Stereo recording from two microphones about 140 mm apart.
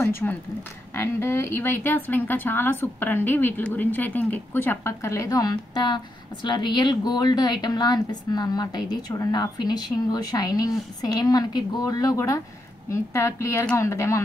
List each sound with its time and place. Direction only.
0.0 s a woman's voice: 15° left (ahead or behind)